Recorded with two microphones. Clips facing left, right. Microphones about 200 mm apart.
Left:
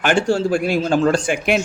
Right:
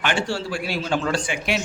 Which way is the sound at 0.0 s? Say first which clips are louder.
Left 8 dB; 45° left (ahead or behind).